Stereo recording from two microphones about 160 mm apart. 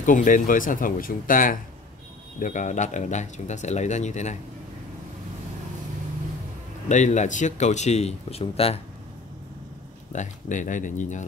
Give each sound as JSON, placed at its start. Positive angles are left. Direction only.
{"t": 0.0, "sound": "speech", "side_deg": 55}
{"t": 6.9, "sound": "speech", "side_deg": 50}
{"t": 10.1, "sound": "speech", "side_deg": 50}